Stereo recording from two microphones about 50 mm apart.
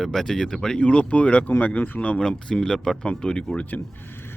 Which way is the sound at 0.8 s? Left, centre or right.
Left.